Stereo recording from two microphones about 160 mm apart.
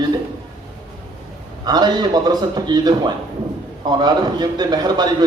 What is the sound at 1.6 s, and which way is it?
A man's voice, 25° right (ahead or behind).